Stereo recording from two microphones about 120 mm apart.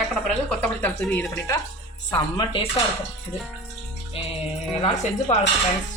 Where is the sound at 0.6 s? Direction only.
10° left (ahead or behind).